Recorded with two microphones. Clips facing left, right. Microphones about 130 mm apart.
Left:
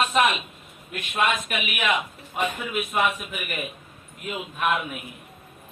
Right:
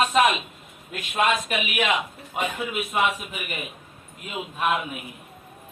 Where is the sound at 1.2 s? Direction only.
35° right (ahead or behind).